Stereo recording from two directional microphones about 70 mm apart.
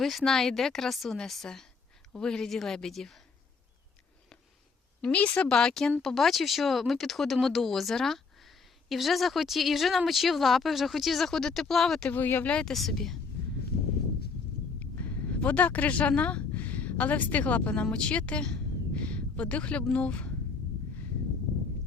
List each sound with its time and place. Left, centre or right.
0.0 s a woman's voice: centre
5.0 s a woman's voice: centre
12.0 s speech: left
12.5 s a woman's voice: centre
14.8 s speech: left
17.9 s a sound: centre
19.9 s a woman's voice: centre